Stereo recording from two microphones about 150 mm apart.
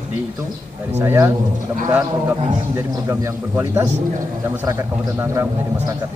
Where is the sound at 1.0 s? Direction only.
15° right (ahead or behind).